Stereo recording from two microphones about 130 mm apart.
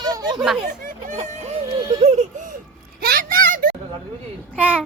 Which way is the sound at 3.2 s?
90° right.